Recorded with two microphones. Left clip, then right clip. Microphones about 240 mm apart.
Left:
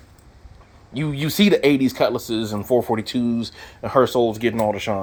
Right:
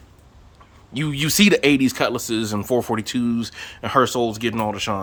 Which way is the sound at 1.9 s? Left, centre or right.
Right.